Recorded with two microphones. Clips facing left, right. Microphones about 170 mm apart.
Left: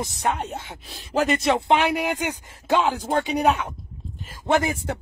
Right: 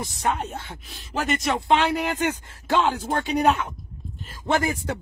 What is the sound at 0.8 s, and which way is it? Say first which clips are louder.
Speech: left 5 dB; 35° left (ahead or behind).